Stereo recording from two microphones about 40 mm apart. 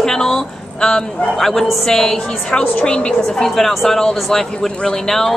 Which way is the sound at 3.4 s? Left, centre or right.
Centre.